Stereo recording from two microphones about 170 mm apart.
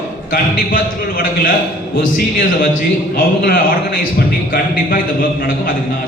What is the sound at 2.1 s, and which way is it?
A man's voice, 55° left (ahead or behind).